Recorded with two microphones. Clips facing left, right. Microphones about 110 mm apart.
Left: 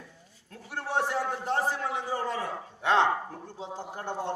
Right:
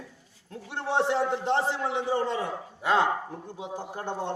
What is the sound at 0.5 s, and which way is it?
A man's voice, 25° right (ahead or behind).